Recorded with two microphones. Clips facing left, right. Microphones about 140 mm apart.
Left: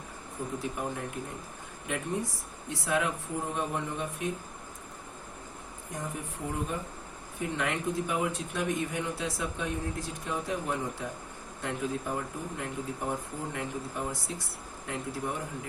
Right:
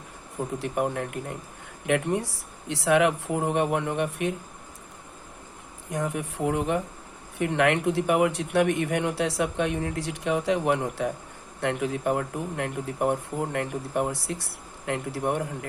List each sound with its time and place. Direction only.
0.6 s speech: 65° right (ahead or behind)
5.9 s speech: 75° right (ahead or behind)